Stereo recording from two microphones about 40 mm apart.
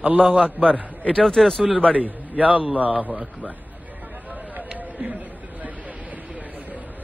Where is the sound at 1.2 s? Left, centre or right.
Centre.